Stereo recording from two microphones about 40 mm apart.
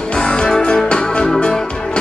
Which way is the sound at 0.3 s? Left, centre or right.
Left.